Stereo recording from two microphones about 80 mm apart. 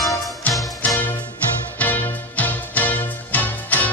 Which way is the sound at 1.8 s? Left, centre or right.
Left.